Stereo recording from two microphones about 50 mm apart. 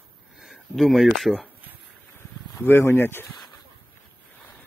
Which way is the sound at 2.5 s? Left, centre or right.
Left.